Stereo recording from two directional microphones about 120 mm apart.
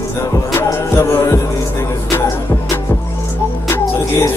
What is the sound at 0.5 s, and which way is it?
Music, 20° left (ahead or behind).